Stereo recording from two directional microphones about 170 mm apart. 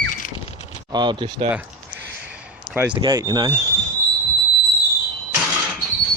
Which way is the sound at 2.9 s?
25° right (ahead or behind).